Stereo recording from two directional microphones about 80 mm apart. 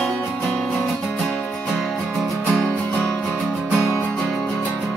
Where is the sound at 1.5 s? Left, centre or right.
Centre.